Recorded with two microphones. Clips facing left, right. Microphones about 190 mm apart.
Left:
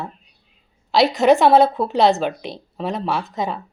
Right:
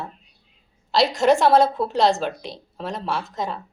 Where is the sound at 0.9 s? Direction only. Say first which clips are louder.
Left 3 dB; centre (ahead or behind).